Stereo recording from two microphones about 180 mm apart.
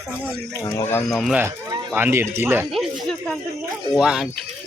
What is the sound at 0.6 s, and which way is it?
Speech, 15° left (ahead or behind).